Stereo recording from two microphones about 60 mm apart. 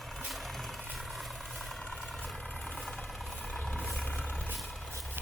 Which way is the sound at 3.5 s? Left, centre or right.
Left.